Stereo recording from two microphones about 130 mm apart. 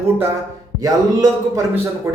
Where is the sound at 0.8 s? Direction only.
30° right (ahead or behind).